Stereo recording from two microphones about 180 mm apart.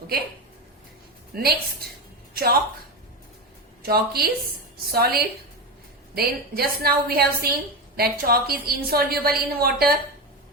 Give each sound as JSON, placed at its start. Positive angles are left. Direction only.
{"t": 1.3, "sound": "a woman's voice", "side_deg": -60}
{"t": 3.8, "sound": "a woman's voice", "side_deg": -60}